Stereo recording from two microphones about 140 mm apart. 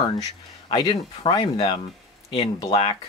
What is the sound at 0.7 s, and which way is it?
Speech, 35° left (ahead or behind).